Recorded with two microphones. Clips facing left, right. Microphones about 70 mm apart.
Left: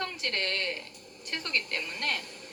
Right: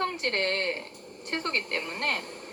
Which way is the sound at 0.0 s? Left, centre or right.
Right.